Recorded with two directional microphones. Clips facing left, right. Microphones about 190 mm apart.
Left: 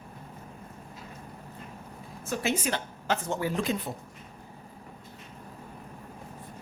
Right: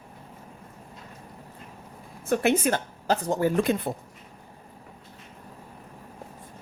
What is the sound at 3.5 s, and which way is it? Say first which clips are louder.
Speech: right 6 dB; 55° right (ahead or behind).